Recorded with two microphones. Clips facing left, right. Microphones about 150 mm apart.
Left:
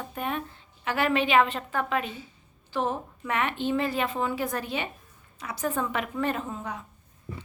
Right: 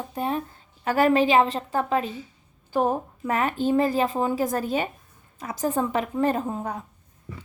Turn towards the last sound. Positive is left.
turn(degrees=-45)  # may be behind; listen again after turning